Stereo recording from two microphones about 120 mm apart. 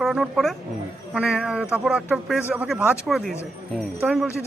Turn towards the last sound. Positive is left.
turn(degrees=-5)  # may be behind; listen again after turning